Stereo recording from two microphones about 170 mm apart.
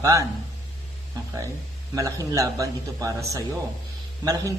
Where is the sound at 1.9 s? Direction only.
20° right (ahead or behind).